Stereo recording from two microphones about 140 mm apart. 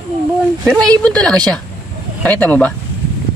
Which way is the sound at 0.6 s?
5° left (ahead or behind).